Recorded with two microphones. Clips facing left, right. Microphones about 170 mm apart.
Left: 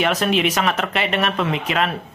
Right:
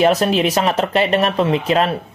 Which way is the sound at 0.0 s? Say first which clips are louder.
Right 4 dB; 35° right (ahead or behind).